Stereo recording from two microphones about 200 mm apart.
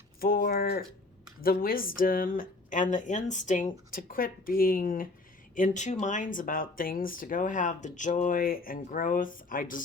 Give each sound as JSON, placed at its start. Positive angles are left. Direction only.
{"t": 0.2, "sound": "speech", "side_deg": 45}